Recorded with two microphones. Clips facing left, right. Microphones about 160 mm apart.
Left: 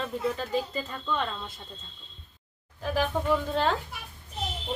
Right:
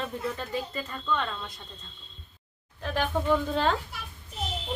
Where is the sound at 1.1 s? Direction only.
15° left (ahead or behind).